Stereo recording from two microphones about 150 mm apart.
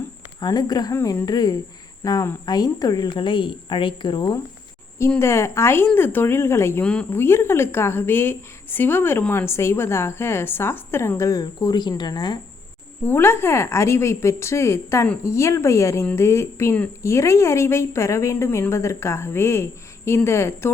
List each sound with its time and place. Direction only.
0.3 s speech: 25° left (ahead or behind)
5.2 s speech: 15° left (ahead or behind)
13.1 s speech: 15° left (ahead or behind)